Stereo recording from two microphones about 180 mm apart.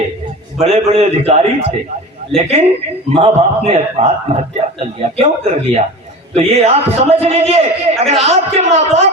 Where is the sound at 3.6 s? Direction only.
35° right (ahead or behind).